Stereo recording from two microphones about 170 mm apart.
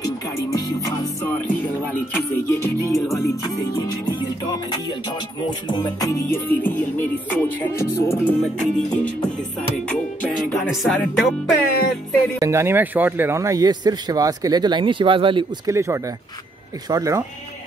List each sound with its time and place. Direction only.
0.0 s music: 20° left (ahead or behind)
4.6 s music: 25° left (ahead or behind); by 9.1 s 5° left (ahead or behind)
10.5 s speech: centre (ahead or behind)
12.4 s a man's voice: 15° right (ahead or behind)
15.6 s a man's voice: 15° right (ahead or behind)